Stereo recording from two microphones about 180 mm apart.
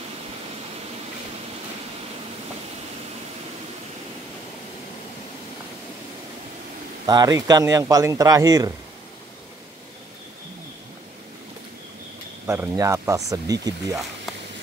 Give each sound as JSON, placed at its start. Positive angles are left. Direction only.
{"t": 7.1, "sound": "speech", "side_deg": -20}
{"t": 12.4, "sound": "speech", "side_deg": -15}